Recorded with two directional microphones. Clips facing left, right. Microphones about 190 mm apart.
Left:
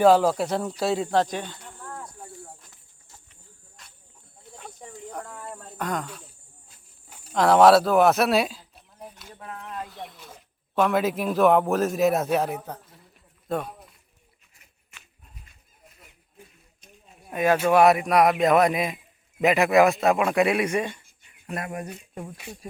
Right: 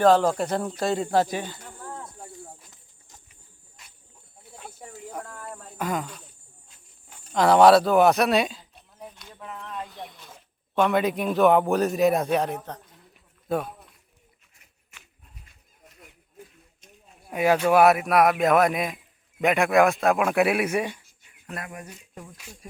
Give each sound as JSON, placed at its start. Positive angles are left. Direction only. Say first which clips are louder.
{"t": 0.0, "sound": "a man's voice", "louder": "left 1 dB", "side_deg": 10}
{"t": 2.0, "sound": "cricket", "louder": "even", "side_deg": -20}
{"t": 4.5, "sound": "a sound", "louder": "even", "side_deg": -5}
{"t": 10.8, "sound": "a man's voice", "louder": "even", "side_deg": 0}
{"t": 17.2, "sound": "a man's voice", "louder": "even", "side_deg": -10}
{"t": 21.4, "sound": "speech", "louder": "left 5 dB", "side_deg": 25}
{"t": 21.8, "sound": "speech", "louder": "left 6 dB", "side_deg": 60}